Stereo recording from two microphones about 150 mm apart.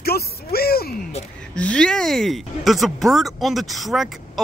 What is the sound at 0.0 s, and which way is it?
Music, 90° left.